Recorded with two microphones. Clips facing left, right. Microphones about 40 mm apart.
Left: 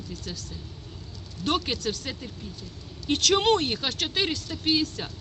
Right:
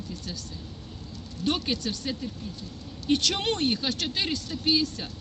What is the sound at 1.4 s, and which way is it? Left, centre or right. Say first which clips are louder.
Speech: left 1 dB; left.